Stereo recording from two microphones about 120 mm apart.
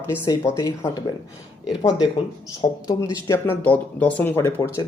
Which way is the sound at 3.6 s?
15° left (ahead or behind).